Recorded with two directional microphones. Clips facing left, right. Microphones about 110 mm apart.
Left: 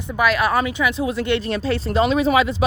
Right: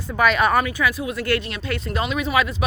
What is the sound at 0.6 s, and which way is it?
Speech, 20° left (ahead or behind).